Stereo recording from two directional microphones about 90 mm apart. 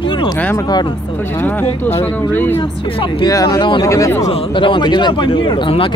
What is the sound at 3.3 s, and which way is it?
Speech, 45° left (ahead or behind).